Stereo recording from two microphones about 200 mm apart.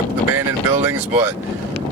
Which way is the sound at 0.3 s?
15° right (ahead or behind).